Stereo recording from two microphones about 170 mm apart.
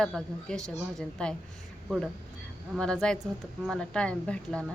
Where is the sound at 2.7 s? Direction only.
5° left (ahead or behind).